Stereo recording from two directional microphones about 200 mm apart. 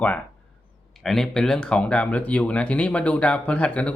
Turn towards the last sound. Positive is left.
turn(degrees=5)  # may be behind; listen again after turning